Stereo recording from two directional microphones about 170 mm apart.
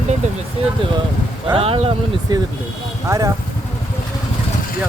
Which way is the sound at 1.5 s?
35° right (ahead or behind).